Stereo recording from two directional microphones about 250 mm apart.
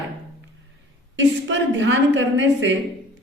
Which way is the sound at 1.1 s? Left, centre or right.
Right.